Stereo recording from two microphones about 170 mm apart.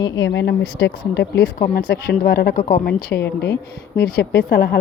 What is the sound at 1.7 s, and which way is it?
A woman's voice, 70° left (ahead or behind).